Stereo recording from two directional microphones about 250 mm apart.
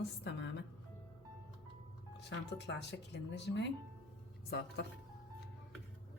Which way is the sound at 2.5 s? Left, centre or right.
Left.